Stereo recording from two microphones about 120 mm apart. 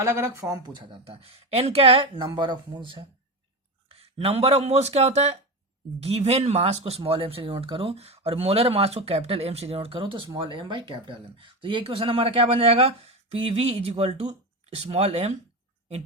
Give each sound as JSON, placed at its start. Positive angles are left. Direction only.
{"t": 0.0, "sound": "speech", "side_deg": -20}
{"t": 0.9, "sound": "speech", "side_deg": -50}
{"t": 3.9, "sound": "speech", "side_deg": -55}